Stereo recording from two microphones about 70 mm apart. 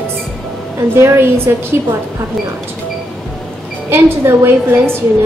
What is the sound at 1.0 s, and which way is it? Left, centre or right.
Speech, right.